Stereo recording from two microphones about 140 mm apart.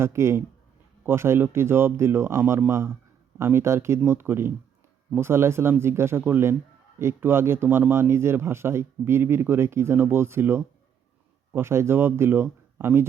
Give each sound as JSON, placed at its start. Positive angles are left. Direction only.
{"t": 0.0, "sound": "speech", "side_deg": -20}